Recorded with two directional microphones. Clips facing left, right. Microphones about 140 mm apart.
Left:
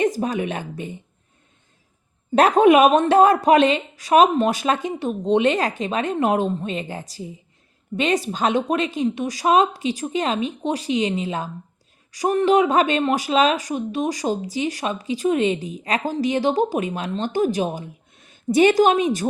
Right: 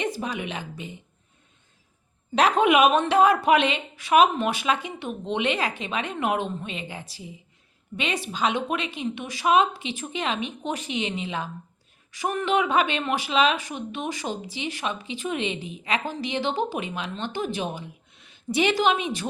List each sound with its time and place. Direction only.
0.0 s a woman's voice: 45° left (ahead or behind)
2.3 s speech: 45° left (ahead or behind)